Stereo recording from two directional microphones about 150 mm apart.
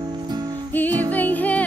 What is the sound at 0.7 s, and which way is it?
Music, 10° left (ahead or behind).